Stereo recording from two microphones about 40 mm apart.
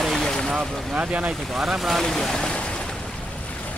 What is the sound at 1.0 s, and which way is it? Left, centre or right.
Speech, centre.